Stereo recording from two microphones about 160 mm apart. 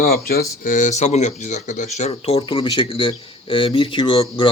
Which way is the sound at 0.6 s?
50° left (ahead or behind).